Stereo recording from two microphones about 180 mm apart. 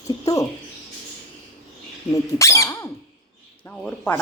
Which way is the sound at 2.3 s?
15° left (ahead or behind).